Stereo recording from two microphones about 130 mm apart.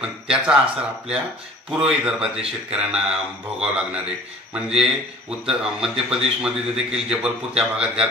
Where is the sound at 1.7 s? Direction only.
5° right (ahead or behind).